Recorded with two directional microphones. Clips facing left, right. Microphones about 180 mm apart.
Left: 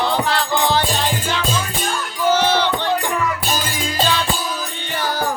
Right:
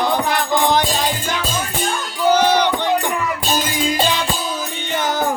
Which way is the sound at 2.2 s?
15° right (ahead or behind).